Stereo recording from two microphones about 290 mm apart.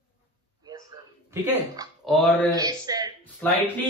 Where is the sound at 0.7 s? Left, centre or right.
Centre.